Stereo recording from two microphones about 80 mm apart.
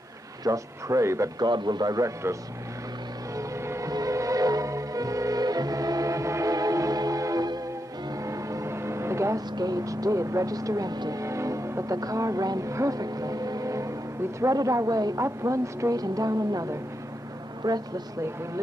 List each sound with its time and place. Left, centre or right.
0.4 s speech: right
1.4 s a man's voice: right
3.3 s vehicle: right
3.9 s music: right
8.3 s vehicle: right
9.6 s speech: right
17.6 s a man's voice: right